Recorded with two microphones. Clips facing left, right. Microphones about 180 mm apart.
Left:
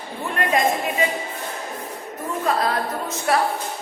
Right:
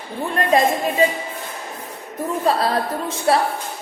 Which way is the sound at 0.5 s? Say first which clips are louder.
Right 4 dB; 35° right (ahead or behind).